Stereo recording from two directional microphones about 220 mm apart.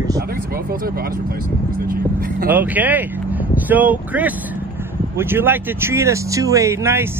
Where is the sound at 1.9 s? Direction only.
40° right (ahead or behind).